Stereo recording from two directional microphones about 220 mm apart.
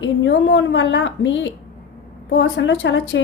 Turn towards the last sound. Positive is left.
turn(degrees=55)  # may be behind; listen again after turning